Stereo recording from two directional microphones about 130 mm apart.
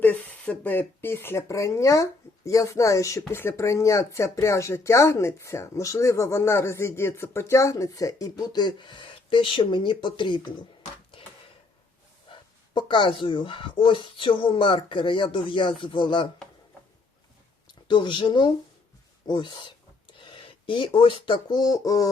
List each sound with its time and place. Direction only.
0.0 s speech: 10° left (ahead or behind); by 10.7 s 35° left (ahead or behind)
11.1 s a sound: 40° left (ahead or behind)
12.3 s speech: 35° left (ahead or behind)
17.7 s speech: 35° left (ahead or behind)